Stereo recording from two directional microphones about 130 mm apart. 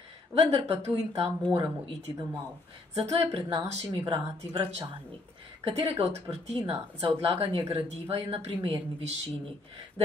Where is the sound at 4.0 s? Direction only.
45° right (ahead or behind).